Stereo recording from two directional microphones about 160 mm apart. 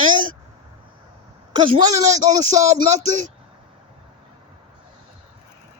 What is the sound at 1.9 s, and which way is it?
Speech, 45° right (ahead or behind).